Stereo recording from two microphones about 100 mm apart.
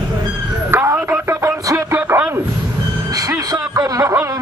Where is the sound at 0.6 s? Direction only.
25° right (ahead or behind).